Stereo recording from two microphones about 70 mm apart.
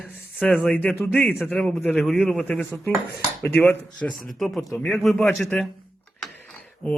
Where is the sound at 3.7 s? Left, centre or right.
Centre.